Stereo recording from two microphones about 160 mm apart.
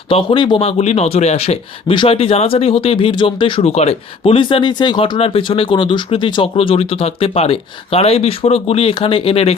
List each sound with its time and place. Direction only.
0.1 s a man's voice: 30° left (ahead or behind)